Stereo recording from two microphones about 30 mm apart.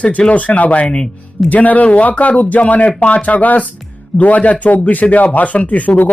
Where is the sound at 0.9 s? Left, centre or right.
Left.